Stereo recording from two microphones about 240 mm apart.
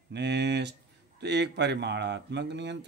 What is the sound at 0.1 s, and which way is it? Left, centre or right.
Speech, right.